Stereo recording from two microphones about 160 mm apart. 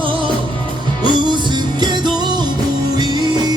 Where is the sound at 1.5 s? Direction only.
30° right (ahead or behind).